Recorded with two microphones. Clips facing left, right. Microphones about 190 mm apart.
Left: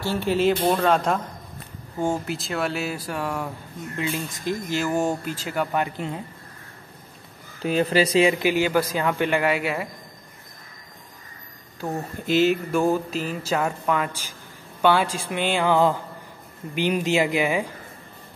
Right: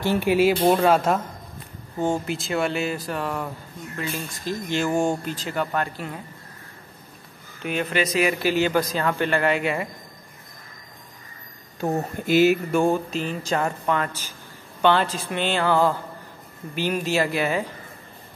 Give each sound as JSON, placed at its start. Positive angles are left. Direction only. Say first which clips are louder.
{"t": 0.0, "sound": "speech", "louder": "right 2 dB", "side_deg": -15}
{"t": 2.0, "sound": "speech", "louder": "right 1 dB", "side_deg": 5}
{"t": 4.6, "sound": "speech", "louder": "right 2 dB", "side_deg": 5}
{"t": 7.6, "sound": "speech", "louder": "left 4 dB", "side_deg": 35}
{"t": 12.3, "sound": "speech", "louder": "right 2 dB", "side_deg": -10}